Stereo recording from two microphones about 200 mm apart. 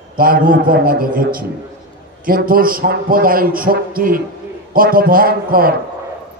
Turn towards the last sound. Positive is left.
turn(degrees=-45)  # may be behind; listen again after turning